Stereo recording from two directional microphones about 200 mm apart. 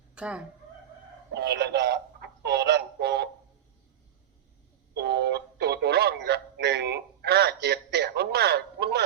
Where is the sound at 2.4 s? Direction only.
55° right (ahead or behind).